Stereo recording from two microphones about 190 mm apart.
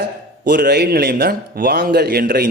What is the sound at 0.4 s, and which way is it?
A man's voice, 55° right (ahead or behind).